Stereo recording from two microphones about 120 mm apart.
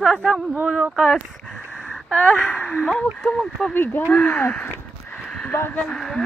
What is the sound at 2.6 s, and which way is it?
A woman's voice, 5° left (ahead or behind).